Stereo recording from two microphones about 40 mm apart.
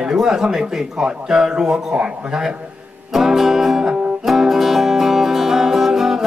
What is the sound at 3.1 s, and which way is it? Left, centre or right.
Music, centre.